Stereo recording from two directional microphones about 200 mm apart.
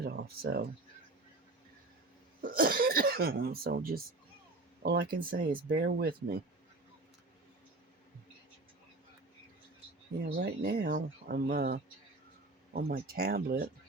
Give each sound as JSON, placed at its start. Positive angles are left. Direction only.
{"t": 0.0, "sound": "a sound", "side_deg": -50}
{"t": 2.4, "sound": "speech", "side_deg": -45}
{"t": 10.3, "sound": "speech", "side_deg": -55}